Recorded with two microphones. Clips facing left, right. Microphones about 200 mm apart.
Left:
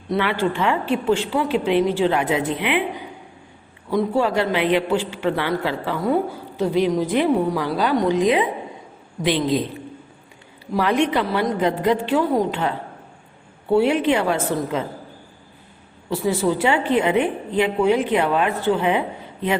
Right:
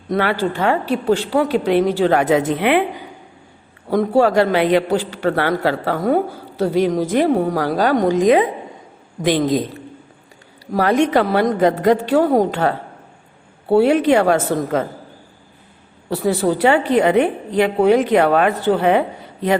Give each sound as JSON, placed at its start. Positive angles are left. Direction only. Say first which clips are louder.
{"t": 0.1, "sound": "a woman's voice", "louder": "right 2 dB", "side_deg": -40}
{"t": 3.8, "sound": "a woman's voice", "louder": "right 5 dB", "side_deg": -45}
{"t": 10.7, "sound": "a woman's voice", "louder": "right 4 dB", "side_deg": -45}
{"t": 16.0, "sound": "a woman's voice", "louder": "right 3 dB", "side_deg": -60}
{"t": 16.8, "sound": "a woman's voice", "louder": "right 4 dB", "side_deg": -40}